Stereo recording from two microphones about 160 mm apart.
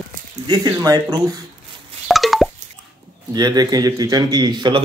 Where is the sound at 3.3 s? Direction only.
25° right (ahead or behind).